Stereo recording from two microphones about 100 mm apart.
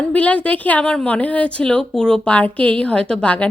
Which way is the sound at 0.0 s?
15° left (ahead or behind).